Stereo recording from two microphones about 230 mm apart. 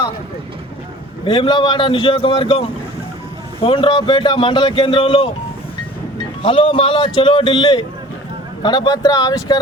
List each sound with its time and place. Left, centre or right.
1.2 s speech: left
6.4 s speech: left